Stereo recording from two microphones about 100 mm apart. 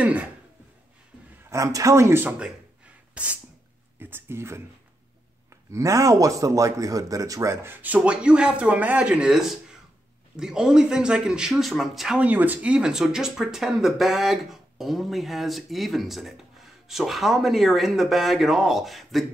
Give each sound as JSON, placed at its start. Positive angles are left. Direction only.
{"t": 0.0, "sound": "speech", "side_deg": -15}
{"t": 1.5, "sound": "a man's voice", "side_deg": -35}
{"t": 2.2, "sound": "a sound", "side_deg": -10}
{"t": 4.0, "sound": "a man's voice", "side_deg": -25}
{"t": 7.6, "sound": "speech", "side_deg": -15}
{"t": 12.2, "sound": "speech", "side_deg": -15}